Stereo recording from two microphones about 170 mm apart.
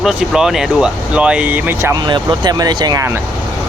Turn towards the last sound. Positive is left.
turn(degrees=-20)  # may be behind; listen again after turning